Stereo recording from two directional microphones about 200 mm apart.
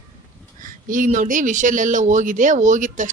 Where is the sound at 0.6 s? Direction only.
40° right (ahead or behind).